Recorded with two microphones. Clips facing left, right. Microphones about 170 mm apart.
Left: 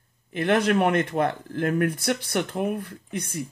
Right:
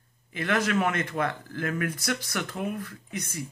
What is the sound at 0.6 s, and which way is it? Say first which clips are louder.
Speech: left 4 dB; 55° left (ahead or behind).